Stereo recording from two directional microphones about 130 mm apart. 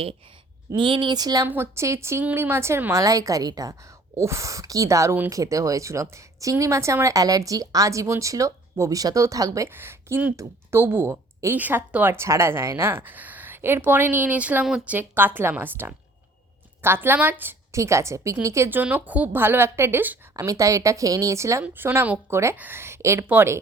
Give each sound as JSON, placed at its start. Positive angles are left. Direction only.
{"t": 0.8, "sound": "a woman's voice", "side_deg": -40}
{"t": 1.5, "sound": "speech", "side_deg": -15}